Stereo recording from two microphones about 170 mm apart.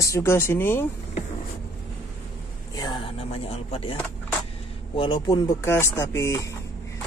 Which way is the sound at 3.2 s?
35° left (ahead or behind).